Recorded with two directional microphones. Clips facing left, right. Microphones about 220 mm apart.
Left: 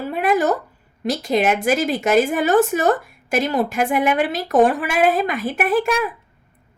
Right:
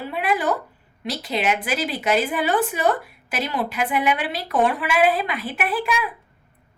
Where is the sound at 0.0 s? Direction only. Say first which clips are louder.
Left 5 dB; 45° left (ahead or behind).